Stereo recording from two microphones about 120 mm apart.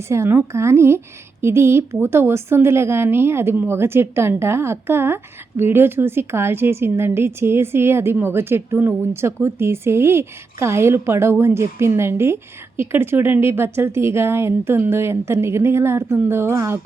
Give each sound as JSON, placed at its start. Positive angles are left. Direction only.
{"t": 0.1, "sound": "a woman's voice", "side_deg": -20}